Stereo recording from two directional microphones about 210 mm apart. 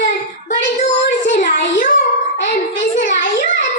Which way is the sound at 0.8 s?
40° left (ahead or behind).